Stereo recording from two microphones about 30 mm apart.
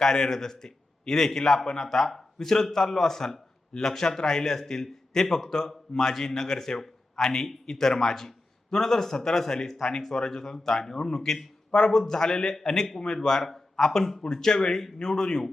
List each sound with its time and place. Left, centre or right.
0.0 s a man's voice: left